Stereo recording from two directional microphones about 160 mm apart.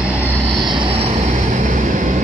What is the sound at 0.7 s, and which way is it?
Vehicle, 35° right (ahead or behind).